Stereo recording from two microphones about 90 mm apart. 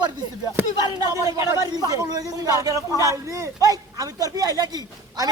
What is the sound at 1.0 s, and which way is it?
Speech, 40° right (ahead or behind).